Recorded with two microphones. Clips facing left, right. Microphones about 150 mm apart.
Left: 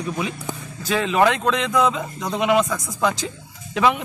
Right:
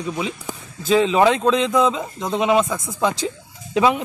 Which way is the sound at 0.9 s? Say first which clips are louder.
Right 3 dB; 20° right (ahead or behind).